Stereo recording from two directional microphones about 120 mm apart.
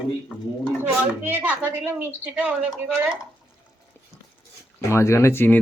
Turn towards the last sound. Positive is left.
turn(degrees=15)  # may be behind; listen again after turning